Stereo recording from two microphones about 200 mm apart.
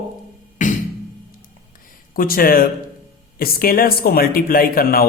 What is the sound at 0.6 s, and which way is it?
Music, 40° left (ahead or behind).